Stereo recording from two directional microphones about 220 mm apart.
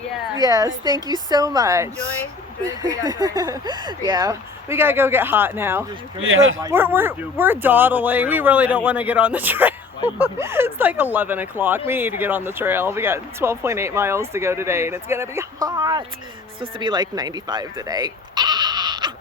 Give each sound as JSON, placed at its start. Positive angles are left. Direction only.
{"t": 0.3, "sound": "speech", "side_deg": -15}
{"t": 6.1, "sound": "speech", "side_deg": -65}
{"t": 6.6, "sound": "speech", "side_deg": -10}